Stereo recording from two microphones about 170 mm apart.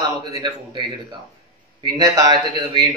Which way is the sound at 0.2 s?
25° right (ahead or behind).